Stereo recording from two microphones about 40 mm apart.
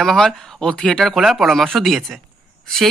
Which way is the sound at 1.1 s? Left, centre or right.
Centre.